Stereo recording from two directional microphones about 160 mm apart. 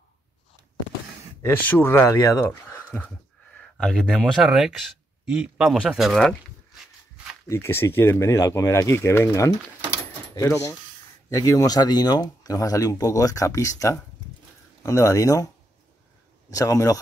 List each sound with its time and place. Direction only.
1.4 s speech: 15° left (ahead or behind)
2.6 s speech: 10° left (ahead or behind)
7.4 s speech: 15° left (ahead or behind)